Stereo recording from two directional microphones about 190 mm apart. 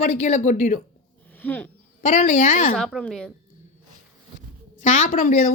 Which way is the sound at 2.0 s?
40° left (ahead or behind).